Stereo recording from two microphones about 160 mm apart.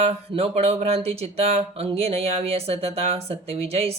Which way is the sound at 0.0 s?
40° right (ahead or behind).